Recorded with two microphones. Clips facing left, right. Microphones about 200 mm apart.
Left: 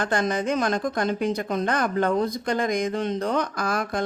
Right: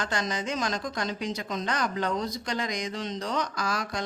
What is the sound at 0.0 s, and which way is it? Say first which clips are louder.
Speech: left 7 dB; 55° left (ahead or behind).